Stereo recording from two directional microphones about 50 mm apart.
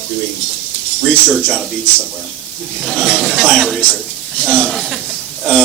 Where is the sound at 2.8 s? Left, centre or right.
Centre.